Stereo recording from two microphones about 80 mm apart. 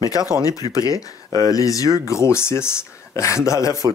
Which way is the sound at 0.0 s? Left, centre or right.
Left.